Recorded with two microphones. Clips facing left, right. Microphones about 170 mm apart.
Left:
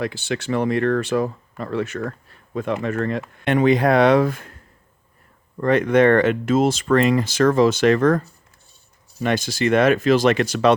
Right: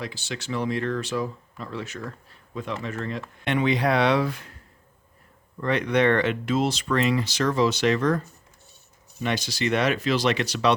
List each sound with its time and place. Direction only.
0.0 s speech: 55° left (ahead or behind)
5.5 s speech: 50° left (ahead or behind)